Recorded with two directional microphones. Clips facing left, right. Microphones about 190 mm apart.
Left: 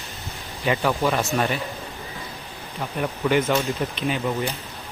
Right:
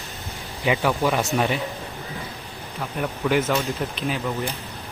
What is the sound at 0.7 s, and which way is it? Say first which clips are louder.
Speech: even; 5° right (ahead or behind).